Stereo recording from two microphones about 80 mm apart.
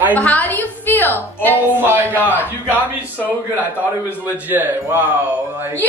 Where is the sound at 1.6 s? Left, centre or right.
Right.